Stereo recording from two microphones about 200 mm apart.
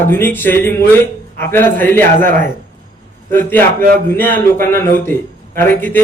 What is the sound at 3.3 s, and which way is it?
Speech, 10° left (ahead or behind).